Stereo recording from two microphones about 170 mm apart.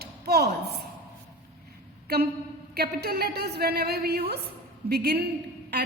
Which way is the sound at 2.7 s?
70° right (ahead or behind).